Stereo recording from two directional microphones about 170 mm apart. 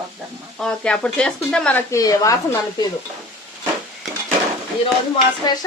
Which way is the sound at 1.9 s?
20° left (ahead or behind).